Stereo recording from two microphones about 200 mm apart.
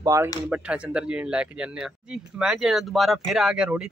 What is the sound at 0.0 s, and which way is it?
Speech, 15° right (ahead or behind).